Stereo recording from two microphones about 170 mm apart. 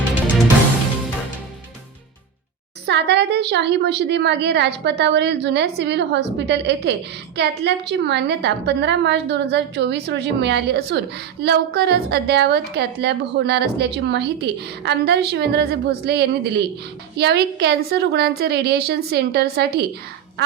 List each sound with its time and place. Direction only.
2.8 s a woman's voice: 85° right; by 19.8 s 70° right (ahead or behind)